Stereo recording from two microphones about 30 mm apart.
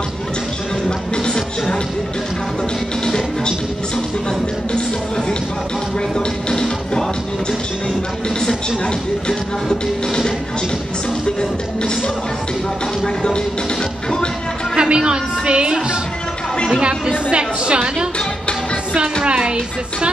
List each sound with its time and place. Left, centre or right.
0.8 s music: left
6.1 s music: left
9.7 s music: centre
13.0 s music: left
14.8 s a woman's voice: right
17.3 s a woman's voice: right
19.2 s a woman's voice: right